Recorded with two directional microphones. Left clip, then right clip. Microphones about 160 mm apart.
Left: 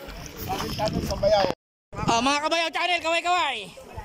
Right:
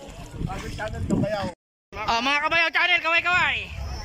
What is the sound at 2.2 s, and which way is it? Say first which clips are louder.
Speech: right 5 dB; 25° left (ahead or behind).